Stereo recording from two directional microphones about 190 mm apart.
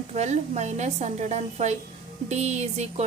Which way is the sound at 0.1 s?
35° right (ahead or behind).